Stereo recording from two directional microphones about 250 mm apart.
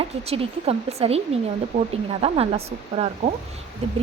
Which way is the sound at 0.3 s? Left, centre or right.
Right.